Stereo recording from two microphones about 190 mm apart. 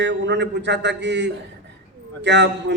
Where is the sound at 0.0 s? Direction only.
65° right (ahead or behind).